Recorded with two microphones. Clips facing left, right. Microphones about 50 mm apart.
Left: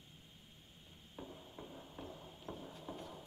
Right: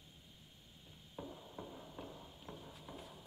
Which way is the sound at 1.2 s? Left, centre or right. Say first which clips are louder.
Right 2 dB; centre.